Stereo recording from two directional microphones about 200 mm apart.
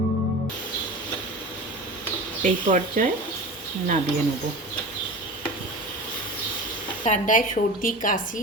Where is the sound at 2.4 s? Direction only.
40° right (ahead or behind).